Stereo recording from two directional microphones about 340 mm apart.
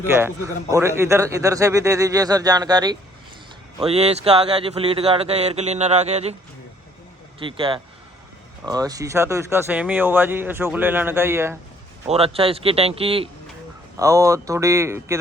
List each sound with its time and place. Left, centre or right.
0.1 s speech: centre
7.3 s speech: centre
12.0 s speech: centre